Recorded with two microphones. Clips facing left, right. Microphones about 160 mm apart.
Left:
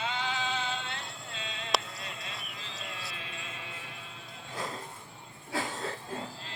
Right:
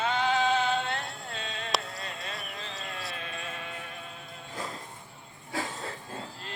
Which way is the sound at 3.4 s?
60° right (ahead or behind).